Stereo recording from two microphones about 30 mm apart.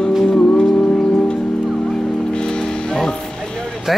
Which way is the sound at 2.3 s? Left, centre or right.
Left.